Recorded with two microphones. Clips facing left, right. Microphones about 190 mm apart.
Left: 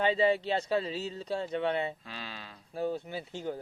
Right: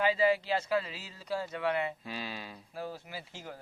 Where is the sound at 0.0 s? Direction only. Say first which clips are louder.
Left 1 dB; 25° left (ahead or behind).